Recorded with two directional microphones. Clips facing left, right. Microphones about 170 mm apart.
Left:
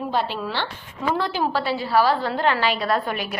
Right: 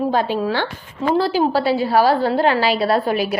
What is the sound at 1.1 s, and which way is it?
A woman's voice, 35° right (ahead or behind).